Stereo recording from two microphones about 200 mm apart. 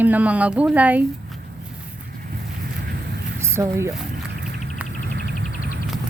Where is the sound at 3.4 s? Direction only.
15° right (ahead or behind).